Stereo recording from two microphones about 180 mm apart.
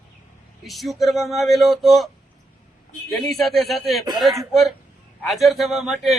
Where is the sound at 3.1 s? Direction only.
Centre (ahead or behind).